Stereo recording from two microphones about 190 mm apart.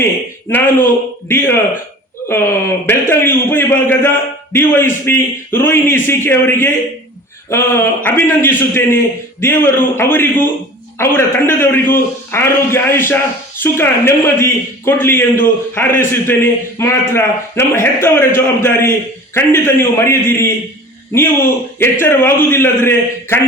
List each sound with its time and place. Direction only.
0.5 s a man's voice: 10° left (ahead or behind)